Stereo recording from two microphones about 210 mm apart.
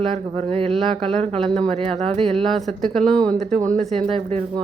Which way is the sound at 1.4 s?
5° left (ahead or behind).